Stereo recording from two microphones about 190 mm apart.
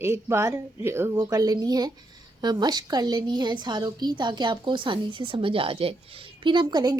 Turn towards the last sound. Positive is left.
turn(degrees=-20)  # may be behind; listen again after turning